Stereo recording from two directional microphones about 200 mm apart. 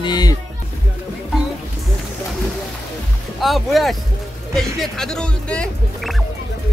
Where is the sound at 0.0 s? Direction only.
20° left (ahead or behind).